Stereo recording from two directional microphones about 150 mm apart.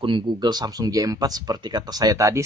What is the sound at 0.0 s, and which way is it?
Speech, 35° right (ahead or behind).